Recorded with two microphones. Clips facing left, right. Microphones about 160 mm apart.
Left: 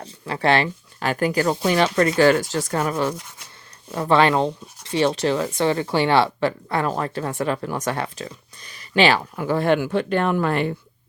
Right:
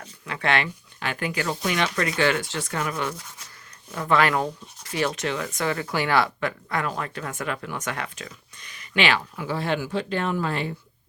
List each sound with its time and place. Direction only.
0.0 s speech: 35° left (ahead or behind)
9.3 s speech: 50° left (ahead or behind)